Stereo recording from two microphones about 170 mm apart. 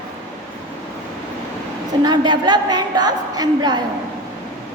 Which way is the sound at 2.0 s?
25° right (ahead or behind).